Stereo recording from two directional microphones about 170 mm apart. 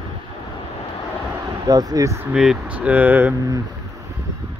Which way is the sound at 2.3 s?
5° right (ahead or behind).